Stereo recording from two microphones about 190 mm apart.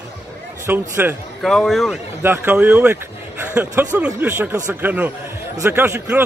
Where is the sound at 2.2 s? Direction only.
10° right (ahead or behind).